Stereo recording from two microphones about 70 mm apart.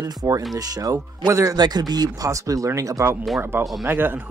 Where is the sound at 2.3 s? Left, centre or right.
Right.